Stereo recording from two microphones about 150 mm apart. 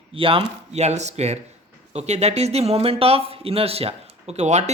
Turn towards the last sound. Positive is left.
turn(degrees=-50)  # may be behind; listen again after turning